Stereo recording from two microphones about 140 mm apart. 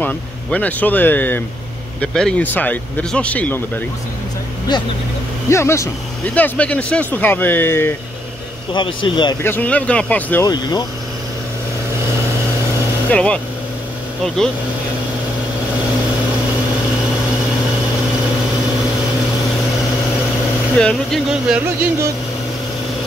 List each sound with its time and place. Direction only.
0.0 s speech: 10° left (ahead or behind)
5.5 s speech: 20° left (ahead or behind)
8.7 s speech: 35° left (ahead or behind)
9.4 s speech: 15° left (ahead or behind)
10.4 s speech: 30° left (ahead or behind)
13.1 s speech: 5° left (ahead or behind)
20.7 s speech: 5° left (ahead or behind)
21.3 s speech: 5° right (ahead or behind)